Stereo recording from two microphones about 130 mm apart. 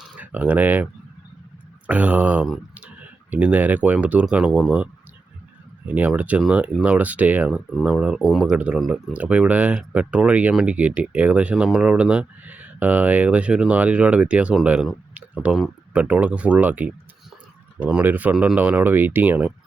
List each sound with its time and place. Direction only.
0.0 s speech: 10° right (ahead or behind)
1.9 s speech: 10° right (ahead or behind)
7.5 s speech: centre (ahead or behind)